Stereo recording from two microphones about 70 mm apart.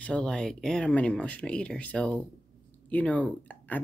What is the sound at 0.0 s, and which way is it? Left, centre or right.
Speech, centre.